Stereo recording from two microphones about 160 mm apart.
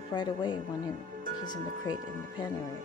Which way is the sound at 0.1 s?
30° left (ahead or behind).